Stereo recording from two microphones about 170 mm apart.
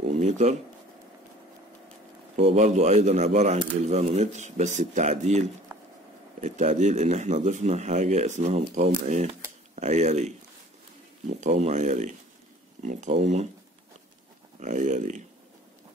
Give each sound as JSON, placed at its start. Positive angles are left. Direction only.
{"t": 0.1, "sound": "speech", "side_deg": -40}
{"t": 2.3, "sound": "speech", "side_deg": -40}
{"t": 6.4, "sound": "speech", "side_deg": -45}
{"t": 13.2, "sound": "speech", "side_deg": -40}
{"t": 14.6, "sound": "speech", "side_deg": -45}